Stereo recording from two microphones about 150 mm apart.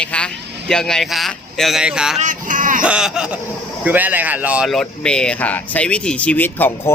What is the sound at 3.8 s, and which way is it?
Speech, 10° right (ahead or behind).